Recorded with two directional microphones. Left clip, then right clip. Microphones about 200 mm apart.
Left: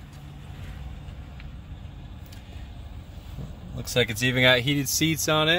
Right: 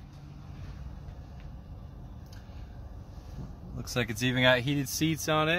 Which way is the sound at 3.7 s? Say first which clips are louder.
Left 8 dB; 25° left (ahead or behind).